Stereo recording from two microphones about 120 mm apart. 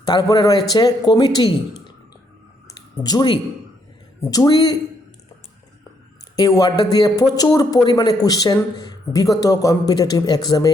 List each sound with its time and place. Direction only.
0.0 s a man's voice: 35° left (ahead or behind)
2.6 s a sound: 35° left (ahead or behind)
4.2 s a man's voice: 30° left (ahead or behind)
6.3 s a man's voice: 35° left (ahead or behind)